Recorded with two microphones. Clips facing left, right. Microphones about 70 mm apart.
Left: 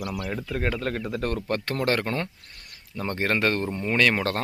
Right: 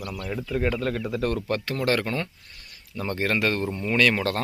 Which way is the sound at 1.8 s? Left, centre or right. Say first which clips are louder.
Right 2 dB; left.